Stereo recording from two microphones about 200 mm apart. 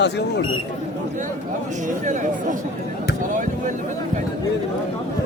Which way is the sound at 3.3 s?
40° right (ahead or behind).